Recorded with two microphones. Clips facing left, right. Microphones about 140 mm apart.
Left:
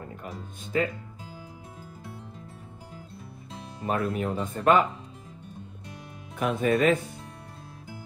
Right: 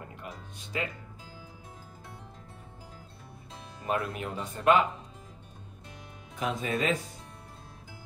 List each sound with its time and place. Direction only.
0.7 s speech: 40° left (ahead or behind)
3.8 s speech: 35° left (ahead or behind)
6.4 s speech: 60° left (ahead or behind)